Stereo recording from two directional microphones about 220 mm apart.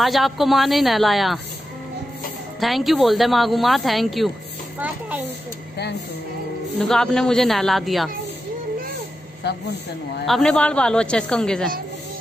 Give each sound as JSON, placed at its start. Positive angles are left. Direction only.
{"t": 0.0, "sound": "speech", "side_deg": 0}
{"t": 2.6, "sound": "a woman's voice", "side_deg": 0}
{"t": 6.8, "sound": "speech", "side_deg": 5}
{"t": 9.4, "sound": "speech", "side_deg": 50}
{"t": 10.2, "sound": "speech", "side_deg": 0}